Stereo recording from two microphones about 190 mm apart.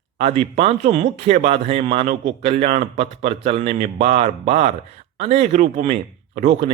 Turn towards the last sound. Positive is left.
turn(degrees=-35)  # may be behind; listen again after turning